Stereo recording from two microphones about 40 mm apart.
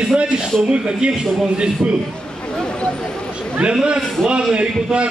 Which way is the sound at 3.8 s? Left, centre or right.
Right.